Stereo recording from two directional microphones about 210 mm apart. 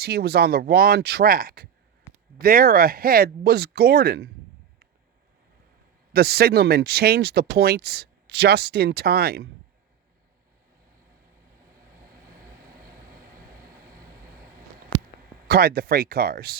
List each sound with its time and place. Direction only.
0.0 s speech: 50° right (ahead or behind)
6.1 s speech: 50° right (ahead or behind)
15.4 s speech: 45° right (ahead or behind)